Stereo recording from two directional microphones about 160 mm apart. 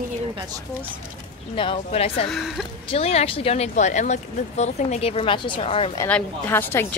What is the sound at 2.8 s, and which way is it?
Speech, 35° left (ahead or behind).